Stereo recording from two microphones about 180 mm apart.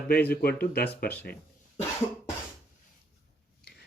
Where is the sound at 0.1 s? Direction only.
60° left (ahead or behind).